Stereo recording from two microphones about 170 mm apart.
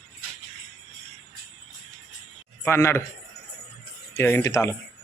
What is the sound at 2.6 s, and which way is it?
Speech, 15° left (ahead or behind).